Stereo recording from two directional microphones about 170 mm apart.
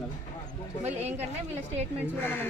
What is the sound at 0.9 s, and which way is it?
Speech, 40° right (ahead or behind).